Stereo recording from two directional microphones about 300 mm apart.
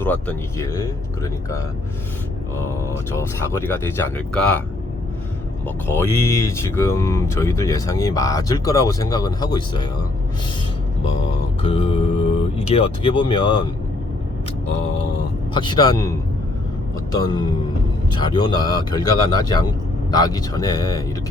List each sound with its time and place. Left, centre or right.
0.0 s speech: centre
5.6 s speech: centre
11.6 s speech: centre
15.5 s speech: centre